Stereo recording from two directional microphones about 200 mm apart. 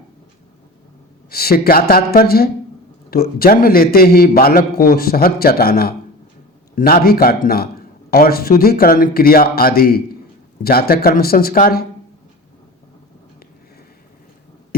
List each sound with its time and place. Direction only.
1.3 s a man's voice: 50° left (ahead or behind)